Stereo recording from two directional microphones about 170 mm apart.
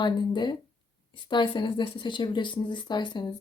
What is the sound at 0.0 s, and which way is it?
A woman's voice, 25° left (ahead or behind).